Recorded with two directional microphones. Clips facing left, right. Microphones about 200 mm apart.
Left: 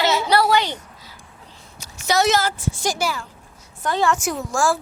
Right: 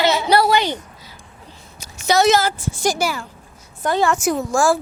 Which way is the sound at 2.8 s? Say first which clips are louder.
Right 5 dB; centre (ahead or behind).